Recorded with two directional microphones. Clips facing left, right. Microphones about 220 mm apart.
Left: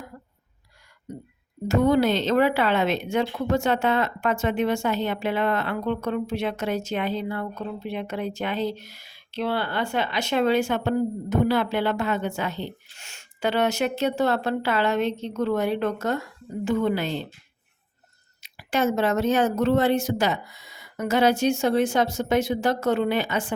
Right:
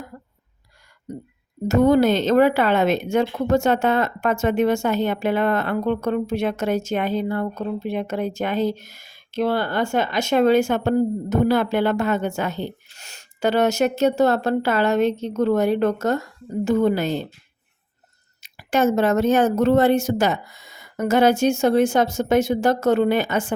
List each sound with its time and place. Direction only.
1.6 s speech: 45° right (ahead or behind)
18.4 s speech: 45° right (ahead or behind)